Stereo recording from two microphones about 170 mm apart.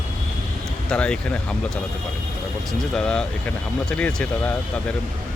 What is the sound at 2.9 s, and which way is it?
Speech, 5° left (ahead or behind).